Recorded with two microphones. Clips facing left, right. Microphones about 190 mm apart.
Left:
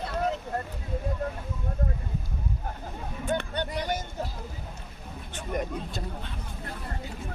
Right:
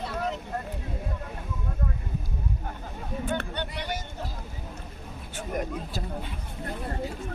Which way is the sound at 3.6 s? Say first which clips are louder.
Left 3 dB; 45° left (ahead or behind).